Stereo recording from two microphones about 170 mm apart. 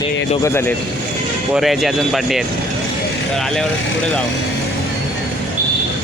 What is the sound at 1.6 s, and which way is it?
Speech, centre (ahead or behind).